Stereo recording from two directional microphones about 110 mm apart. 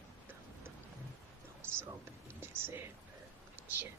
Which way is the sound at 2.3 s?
20° right (ahead or behind).